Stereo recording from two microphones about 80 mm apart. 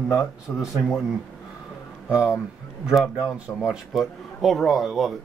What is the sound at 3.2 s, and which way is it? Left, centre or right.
Speech, centre.